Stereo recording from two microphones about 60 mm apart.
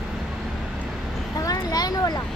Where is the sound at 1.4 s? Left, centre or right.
Left.